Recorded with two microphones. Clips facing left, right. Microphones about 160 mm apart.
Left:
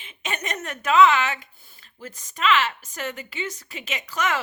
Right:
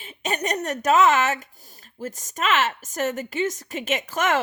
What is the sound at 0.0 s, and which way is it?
Speech, 40° right (ahead or behind).